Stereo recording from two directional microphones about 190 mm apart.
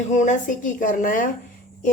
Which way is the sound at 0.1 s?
40° left (ahead or behind).